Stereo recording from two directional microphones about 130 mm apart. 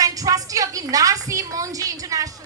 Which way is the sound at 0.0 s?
25° right (ahead or behind).